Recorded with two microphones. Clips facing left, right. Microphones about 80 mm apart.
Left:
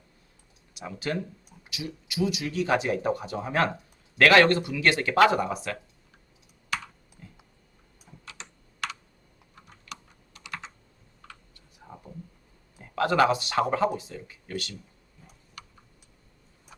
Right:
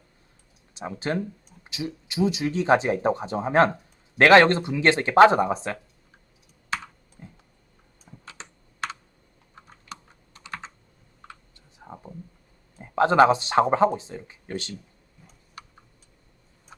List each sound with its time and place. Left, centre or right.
0.7 s speech: right
6.7 s computer keyboard: right
7.2 s a sound: right
8.2 s computer keyboard: right
11.8 s a sound: right
12.8 s speech: right